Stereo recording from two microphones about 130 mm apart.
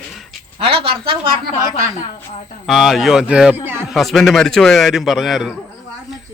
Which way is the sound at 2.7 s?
Centre (ahead or behind).